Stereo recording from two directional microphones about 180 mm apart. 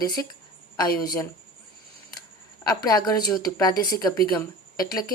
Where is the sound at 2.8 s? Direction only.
20° left (ahead or behind).